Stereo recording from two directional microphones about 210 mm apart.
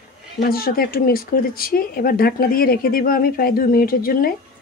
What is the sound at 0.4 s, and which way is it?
Speech, 45° left (ahead or behind).